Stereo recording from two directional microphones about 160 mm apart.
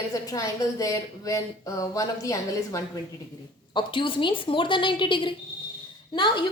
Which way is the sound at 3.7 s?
30° left (ahead or behind).